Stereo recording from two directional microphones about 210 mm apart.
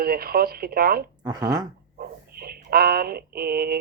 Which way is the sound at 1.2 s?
20° right (ahead or behind).